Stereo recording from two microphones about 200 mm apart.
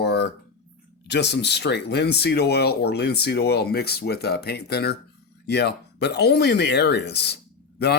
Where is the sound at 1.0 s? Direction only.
60° left (ahead or behind).